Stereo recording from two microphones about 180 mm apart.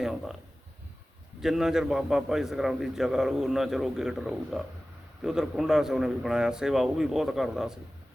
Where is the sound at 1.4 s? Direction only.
Centre (ahead or behind).